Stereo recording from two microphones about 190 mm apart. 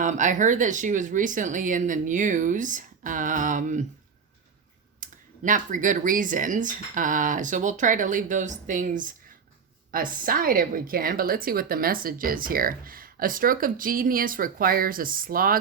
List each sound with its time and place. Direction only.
0.0 s a woman's voice: 40° right (ahead or behind)
4.9 s a woman's voice: 45° right (ahead or behind)